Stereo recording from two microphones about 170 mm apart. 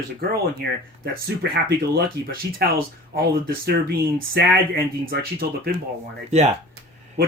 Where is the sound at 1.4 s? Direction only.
70° right (ahead or behind).